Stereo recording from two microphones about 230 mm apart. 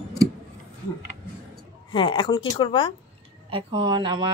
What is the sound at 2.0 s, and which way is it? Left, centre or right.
Speech, left.